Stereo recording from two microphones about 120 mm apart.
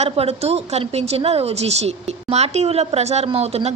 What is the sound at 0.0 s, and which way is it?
A woman's voice, 60° right (ahead or behind).